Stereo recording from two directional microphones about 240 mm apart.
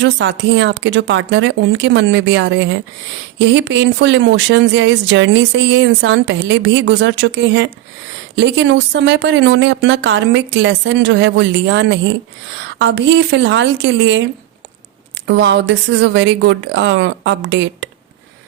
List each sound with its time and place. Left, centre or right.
0.0 s speech: right
15.3 s speech: right